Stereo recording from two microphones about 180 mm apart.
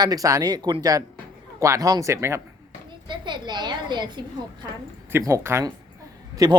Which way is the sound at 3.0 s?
25° right (ahead or behind).